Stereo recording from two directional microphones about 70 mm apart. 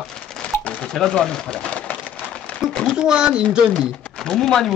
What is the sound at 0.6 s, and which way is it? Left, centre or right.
Speech, centre.